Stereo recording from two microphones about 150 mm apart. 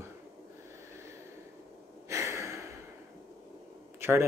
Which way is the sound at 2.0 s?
20° right (ahead or behind).